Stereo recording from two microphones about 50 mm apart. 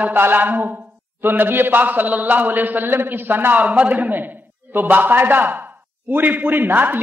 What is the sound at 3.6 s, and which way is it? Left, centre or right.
A man's voice, right.